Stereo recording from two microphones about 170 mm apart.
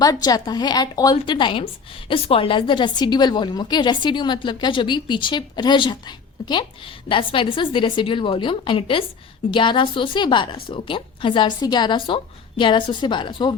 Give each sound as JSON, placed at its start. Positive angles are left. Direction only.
{"t": 0.0, "sound": "a woman's voice", "side_deg": 20}